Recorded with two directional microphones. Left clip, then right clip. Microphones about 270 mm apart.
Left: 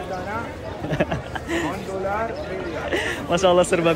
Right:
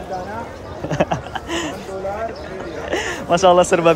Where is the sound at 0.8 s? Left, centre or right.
Centre.